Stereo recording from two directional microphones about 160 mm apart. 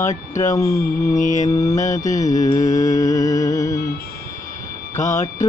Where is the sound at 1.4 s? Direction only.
25° left (ahead or behind).